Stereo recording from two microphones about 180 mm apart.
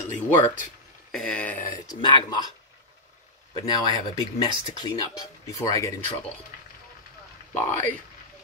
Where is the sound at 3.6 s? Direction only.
20° left (ahead or behind).